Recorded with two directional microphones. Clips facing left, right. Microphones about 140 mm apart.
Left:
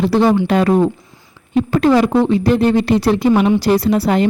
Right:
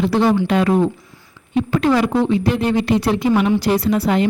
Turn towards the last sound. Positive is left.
turn(degrees=35)  # may be behind; listen again after turning